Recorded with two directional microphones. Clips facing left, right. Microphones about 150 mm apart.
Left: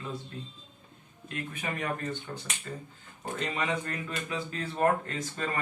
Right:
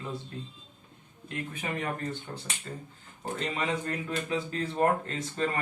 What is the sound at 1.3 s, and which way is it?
Speech, 25° right (ahead or behind).